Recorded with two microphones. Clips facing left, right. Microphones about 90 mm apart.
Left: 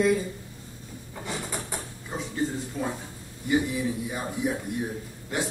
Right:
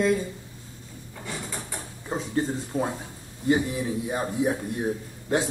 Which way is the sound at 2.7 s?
35° right (ahead or behind).